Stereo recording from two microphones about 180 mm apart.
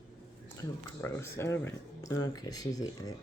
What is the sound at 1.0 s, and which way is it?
Speech, 15° left (ahead or behind).